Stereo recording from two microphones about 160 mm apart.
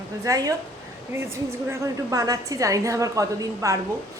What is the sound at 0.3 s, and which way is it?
A woman's voice, 20° right (ahead or behind).